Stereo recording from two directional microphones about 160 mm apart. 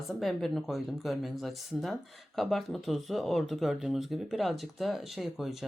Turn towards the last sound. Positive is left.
turn(degrees=0)  # may be behind; listen again after turning